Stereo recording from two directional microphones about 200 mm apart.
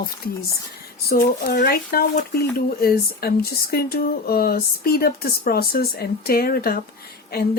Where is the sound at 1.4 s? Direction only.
50° left (ahead or behind).